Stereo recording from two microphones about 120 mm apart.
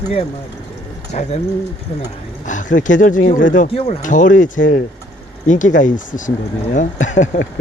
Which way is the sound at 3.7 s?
60° left (ahead or behind).